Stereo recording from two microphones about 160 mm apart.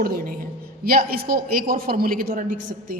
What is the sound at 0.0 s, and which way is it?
A man's voice, 65° right (ahead or behind).